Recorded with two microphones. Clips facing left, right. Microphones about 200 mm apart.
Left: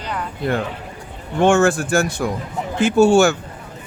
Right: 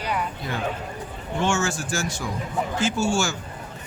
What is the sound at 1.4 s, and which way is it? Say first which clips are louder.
A man's voice: left 10 dB; 55° left (ahead or behind).